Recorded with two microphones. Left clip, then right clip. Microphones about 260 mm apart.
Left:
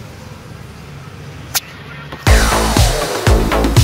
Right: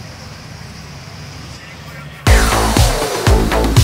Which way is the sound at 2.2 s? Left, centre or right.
Centre.